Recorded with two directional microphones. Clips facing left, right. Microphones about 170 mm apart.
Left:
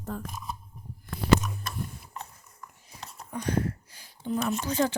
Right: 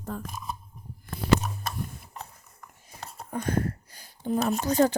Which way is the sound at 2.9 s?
50° right (ahead or behind).